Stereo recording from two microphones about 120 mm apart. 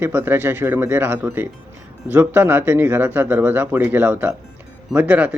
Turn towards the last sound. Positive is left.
turn(degrees=-10)  # may be behind; listen again after turning